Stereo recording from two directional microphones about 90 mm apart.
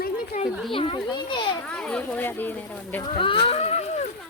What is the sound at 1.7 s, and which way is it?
Speech, 10° left (ahead or behind).